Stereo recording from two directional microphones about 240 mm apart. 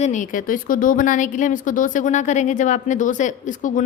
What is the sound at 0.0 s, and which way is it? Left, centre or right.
A woman's voice, left.